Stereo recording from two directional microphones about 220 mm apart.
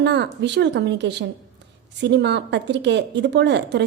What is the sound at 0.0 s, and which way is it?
A woman's voice, 50° right (ahead or behind).